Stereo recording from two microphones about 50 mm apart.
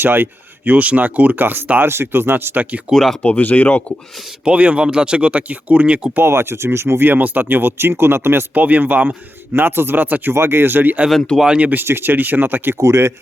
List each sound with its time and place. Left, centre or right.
0.0 s speech: right
2.9 s speech: centre
3.2 s speech: left
4.4 s speech: right
6.2 s speech: right
7.0 s speech: right
8.5 s speech: right
10.3 s speech: right
11.3 s speech: centre
11.9 s speech: right
12.8 s speech: right